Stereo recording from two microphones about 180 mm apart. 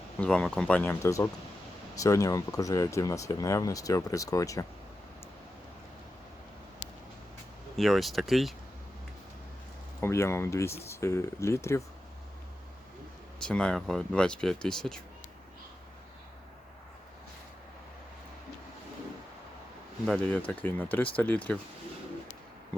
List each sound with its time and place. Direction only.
0.2 s speech: 5° left (ahead or behind)
7.8 s speech: centre (ahead or behind)
10.0 s speech: 15° left (ahead or behind)
13.4 s speech: 5° left (ahead or behind)
20.1 s speech: 5° left (ahead or behind)